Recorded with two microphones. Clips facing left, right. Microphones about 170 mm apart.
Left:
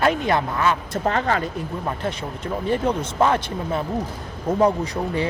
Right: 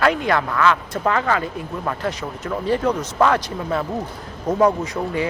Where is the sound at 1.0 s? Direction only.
35° left (ahead or behind).